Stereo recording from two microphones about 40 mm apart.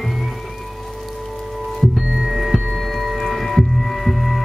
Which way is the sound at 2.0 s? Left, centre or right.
Centre.